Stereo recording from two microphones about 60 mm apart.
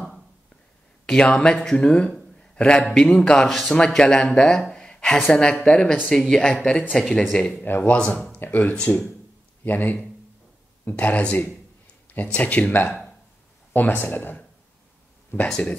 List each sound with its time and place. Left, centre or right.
1.0 s speech: centre
7.5 s speech: left
8.0 s speech: centre
8.4 s speech: left
15.4 s speech: centre